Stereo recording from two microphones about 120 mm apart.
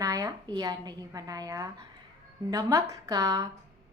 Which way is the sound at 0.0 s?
30° right (ahead or behind).